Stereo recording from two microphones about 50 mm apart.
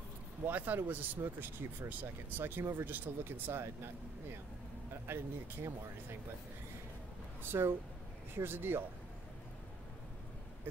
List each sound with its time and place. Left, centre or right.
0.5 s speech: right
5.0 s speech: right
7.4 s speech: right